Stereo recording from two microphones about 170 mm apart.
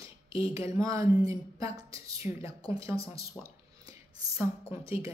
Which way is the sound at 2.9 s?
35° left (ahead or behind).